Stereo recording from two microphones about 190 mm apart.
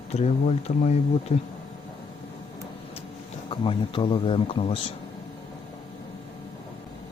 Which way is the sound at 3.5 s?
25° left (ahead or behind).